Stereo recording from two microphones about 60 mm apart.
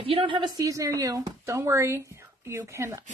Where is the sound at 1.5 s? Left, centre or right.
Right.